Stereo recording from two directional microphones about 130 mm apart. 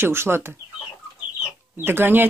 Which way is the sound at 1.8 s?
15° right (ahead or behind).